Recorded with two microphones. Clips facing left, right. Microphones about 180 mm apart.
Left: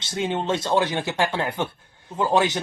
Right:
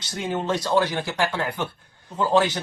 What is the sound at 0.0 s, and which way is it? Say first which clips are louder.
Speech: left 2 dB; 25° left (ahead or behind).